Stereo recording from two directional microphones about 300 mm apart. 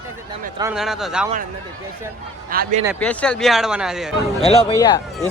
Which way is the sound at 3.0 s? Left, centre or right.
Centre.